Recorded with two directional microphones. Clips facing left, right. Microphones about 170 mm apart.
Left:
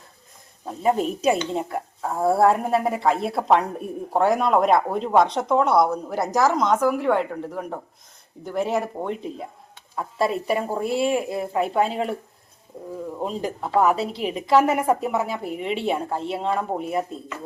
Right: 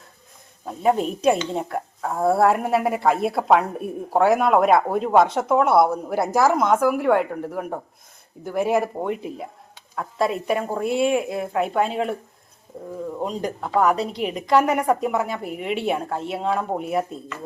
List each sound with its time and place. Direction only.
0.6 s speech: centre (ahead or behind)
9.9 s speech: 5° left (ahead or behind)
13.2 s speech: 5° left (ahead or behind)